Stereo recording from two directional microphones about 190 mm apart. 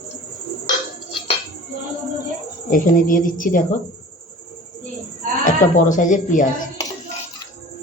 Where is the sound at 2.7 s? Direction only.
45° left (ahead or behind).